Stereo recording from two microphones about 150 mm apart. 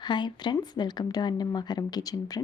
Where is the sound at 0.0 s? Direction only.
30° left (ahead or behind).